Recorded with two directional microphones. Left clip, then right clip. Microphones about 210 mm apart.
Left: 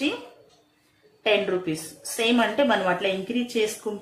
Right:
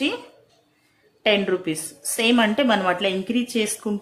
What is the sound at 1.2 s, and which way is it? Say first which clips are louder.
A woman's voice: right 2 dB; 45° right (ahead or behind).